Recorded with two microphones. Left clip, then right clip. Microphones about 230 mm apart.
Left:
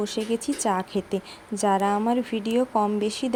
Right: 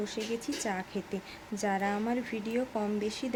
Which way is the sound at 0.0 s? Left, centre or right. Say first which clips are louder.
Left 8 dB; left.